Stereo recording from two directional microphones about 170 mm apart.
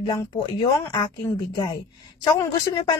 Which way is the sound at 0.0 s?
30° left (ahead or behind).